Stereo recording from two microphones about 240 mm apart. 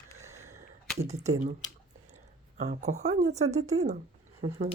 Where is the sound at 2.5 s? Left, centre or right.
Right.